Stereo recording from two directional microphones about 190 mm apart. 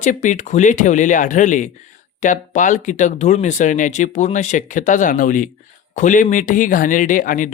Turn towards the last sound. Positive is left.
turn(degrees=45)  # may be behind; listen again after turning